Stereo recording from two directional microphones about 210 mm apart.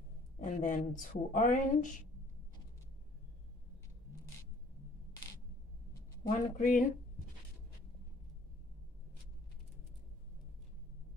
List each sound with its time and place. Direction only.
0.4 s speech: 40° left (ahead or behind)
6.2 s speech: 45° left (ahead or behind)